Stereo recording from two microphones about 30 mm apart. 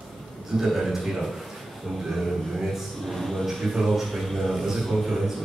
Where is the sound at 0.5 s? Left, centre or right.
Centre.